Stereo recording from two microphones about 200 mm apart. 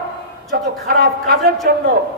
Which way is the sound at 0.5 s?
50° right (ahead or behind).